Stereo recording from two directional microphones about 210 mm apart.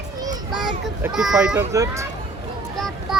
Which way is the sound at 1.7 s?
15° right (ahead or behind).